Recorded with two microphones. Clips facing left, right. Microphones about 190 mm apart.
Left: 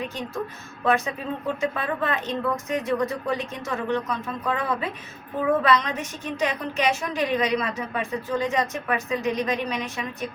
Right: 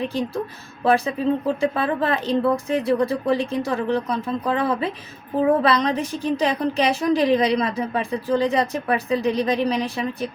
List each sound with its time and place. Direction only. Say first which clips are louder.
0.9 s a woman's voice: right 5 dB; 35° right (ahead or behind)